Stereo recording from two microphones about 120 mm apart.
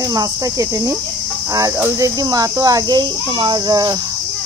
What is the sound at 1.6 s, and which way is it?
Speech, 25° right (ahead or behind).